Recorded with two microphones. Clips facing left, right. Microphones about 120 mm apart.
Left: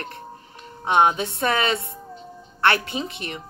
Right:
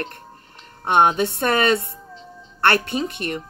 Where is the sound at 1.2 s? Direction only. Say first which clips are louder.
Right 3 dB; 60° right (ahead or behind).